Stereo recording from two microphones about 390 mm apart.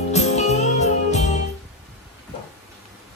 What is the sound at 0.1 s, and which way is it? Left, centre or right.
Music, centre.